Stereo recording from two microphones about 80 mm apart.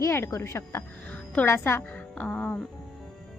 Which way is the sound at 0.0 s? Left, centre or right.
Left.